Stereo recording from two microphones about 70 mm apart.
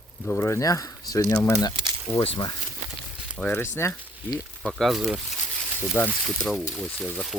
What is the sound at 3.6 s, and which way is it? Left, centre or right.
Speech, left.